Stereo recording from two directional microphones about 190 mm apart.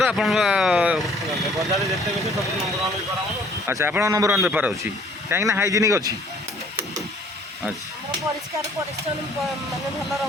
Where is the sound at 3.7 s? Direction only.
10° right (ahead or behind).